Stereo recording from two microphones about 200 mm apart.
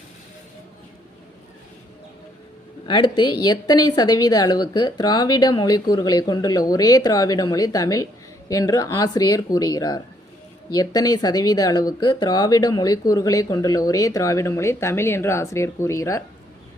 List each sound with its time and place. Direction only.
2.8 s a woman's voice: 25° left (ahead or behind)